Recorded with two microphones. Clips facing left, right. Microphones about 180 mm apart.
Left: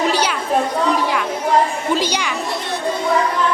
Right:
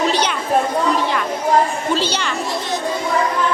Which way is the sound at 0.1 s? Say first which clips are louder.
Even; 10° left (ahead or behind).